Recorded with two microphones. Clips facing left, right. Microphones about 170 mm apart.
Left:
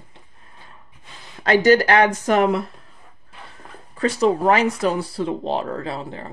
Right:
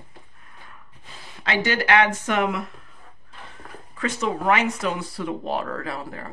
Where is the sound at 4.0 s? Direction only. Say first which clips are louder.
Left 7 dB; 35° left (ahead or behind).